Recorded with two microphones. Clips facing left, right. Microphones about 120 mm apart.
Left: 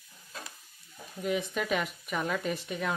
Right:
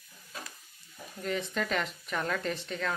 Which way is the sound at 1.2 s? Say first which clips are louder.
Left 2 dB; 15° left (ahead or behind).